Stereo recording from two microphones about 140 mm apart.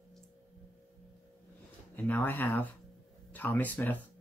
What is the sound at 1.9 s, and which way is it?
Speech, 10° left (ahead or behind).